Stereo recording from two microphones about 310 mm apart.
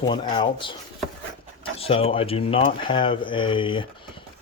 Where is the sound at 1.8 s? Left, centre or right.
Centre.